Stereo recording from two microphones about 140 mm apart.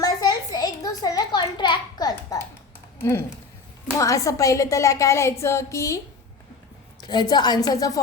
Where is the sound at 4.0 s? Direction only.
25° left (ahead or behind).